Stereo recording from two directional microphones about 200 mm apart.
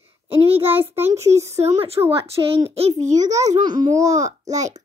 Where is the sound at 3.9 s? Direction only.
35° right (ahead or behind).